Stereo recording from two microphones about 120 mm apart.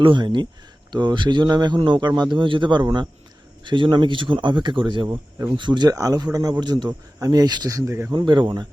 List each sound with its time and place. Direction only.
0.0 s speech: 45° right (ahead or behind); by 8.0 s 25° right (ahead or behind)
8.1 s speech: 40° right (ahead or behind)